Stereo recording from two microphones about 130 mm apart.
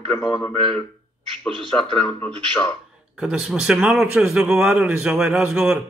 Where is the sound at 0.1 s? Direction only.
5° left (ahead or behind).